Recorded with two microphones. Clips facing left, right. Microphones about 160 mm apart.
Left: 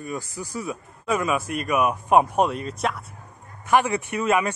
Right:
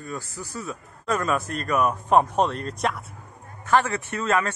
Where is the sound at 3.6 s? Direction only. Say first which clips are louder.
Left 1 dB; 15° left (ahead or behind).